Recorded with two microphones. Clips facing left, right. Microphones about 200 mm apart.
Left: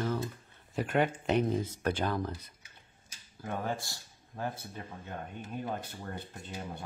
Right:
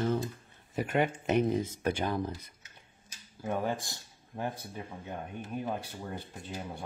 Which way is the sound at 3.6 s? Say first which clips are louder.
Right 2 dB; 20° right (ahead or behind).